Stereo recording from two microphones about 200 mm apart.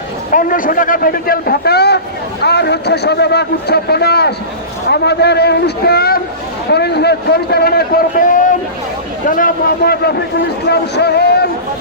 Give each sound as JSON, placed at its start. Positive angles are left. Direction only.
{"t": 0.3, "sound": "a man's voice", "side_deg": 45}